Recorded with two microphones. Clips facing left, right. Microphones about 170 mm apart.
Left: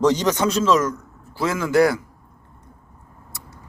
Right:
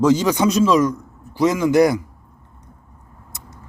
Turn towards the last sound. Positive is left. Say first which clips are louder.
# even
turn(degrees=-20)  # may be behind; listen again after turning